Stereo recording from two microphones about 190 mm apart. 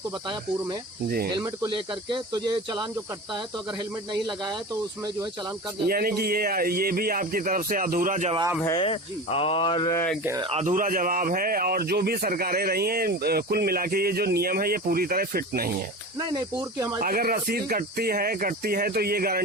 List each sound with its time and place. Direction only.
1.4 s speech: 20° right (ahead or behind)
5.9 s a man's voice: 50° right (ahead or behind)
8.6 s speech: 25° left (ahead or behind)
9.9 s speech: 10° left (ahead or behind)
10.4 s a man's voice: 35° right (ahead or behind); by 15.7 s 50° right (ahead or behind)
16.1 s speech: 20° right (ahead or behind)
17.0 s a man's voice: 50° right (ahead or behind)